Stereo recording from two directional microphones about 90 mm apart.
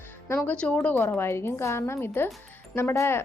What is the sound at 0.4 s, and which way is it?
A woman's voice, 15° left (ahead or behind).